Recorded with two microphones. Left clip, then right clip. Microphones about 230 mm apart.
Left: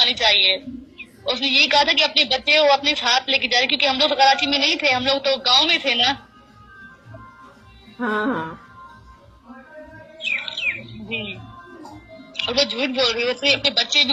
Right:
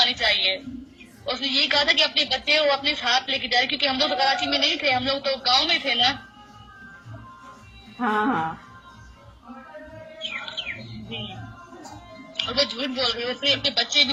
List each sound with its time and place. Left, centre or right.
0.2 s a woman's voice: centre
8.0 s music: centre
10.2 s bird: centre
12.3 s a woman's voice: centre